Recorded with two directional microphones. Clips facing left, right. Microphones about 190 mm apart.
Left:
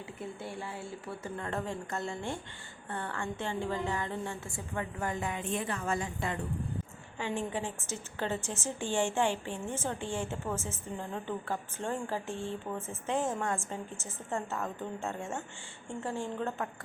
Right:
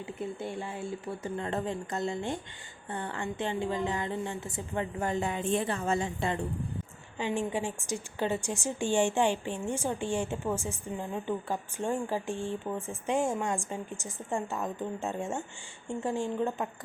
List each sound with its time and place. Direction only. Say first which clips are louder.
0.2 s a woman's voice: right 4 dB; 20° right (ahead or behind)
7.2 s a woman's voice: right 3 dB; 15° right (ahead or behind)